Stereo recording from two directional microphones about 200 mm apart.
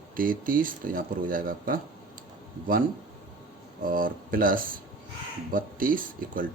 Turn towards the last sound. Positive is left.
turn(degrees=-45)  # may be behind; listen again after turning